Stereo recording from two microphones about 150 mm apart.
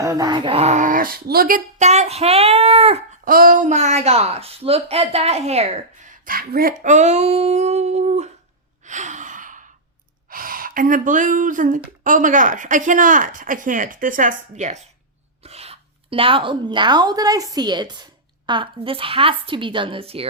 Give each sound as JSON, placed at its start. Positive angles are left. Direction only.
{"t": 0.0, "sound": "speech", "side_deg": -20}
{"t": 1.9, "sound": "a child's voice", "side_deg": -45}
{"t": 3.2, "sound": "speech", "side_deg": -70}
{"t": 6.2, "sound": "speech", "side_deg": -80}
{"t": 8.8, "sound": "gasp", "side_deg": -55}
{"t": 10.2, "sound": "speech", "side_deg": -70}